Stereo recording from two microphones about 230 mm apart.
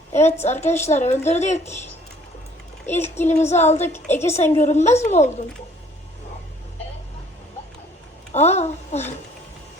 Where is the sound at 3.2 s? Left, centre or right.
Left.